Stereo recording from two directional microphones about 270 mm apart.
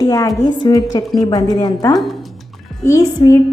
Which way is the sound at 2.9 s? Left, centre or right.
Centre.